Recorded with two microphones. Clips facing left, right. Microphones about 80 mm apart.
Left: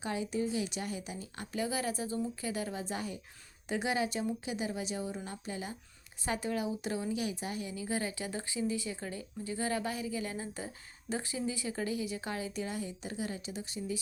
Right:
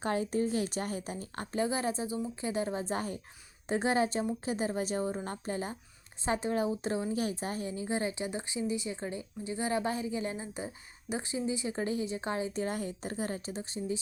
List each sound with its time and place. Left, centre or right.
0.0 s a woman's voice: right
2.0 s speech: centre
2.4 s a woman's voice: right
6.2 s a woman's voice: right
10.4 s a woman's voice: centre
12.6 s a woman's voice: right